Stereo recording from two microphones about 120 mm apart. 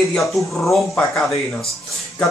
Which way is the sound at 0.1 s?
Centre (ahead or behind).